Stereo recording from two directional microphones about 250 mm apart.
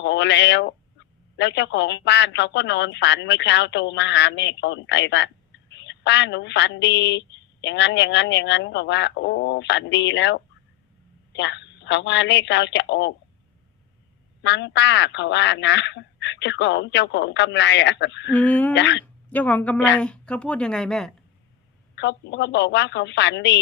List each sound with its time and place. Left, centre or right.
0.0 s a woman's voice: left
14.4 s a woman's voice: left
18.3 s speech: centre
18.7 s a woman's voice: left
19.3 s a woman's voice: centre
21.9 s a woman's voice: left